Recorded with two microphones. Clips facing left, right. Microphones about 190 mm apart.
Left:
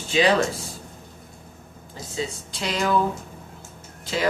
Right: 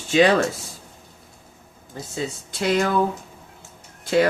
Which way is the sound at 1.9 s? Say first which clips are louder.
Right 1 dB; 50° right (ahead or behind).